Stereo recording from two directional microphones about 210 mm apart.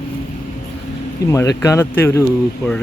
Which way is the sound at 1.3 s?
15° left (ahead or behind).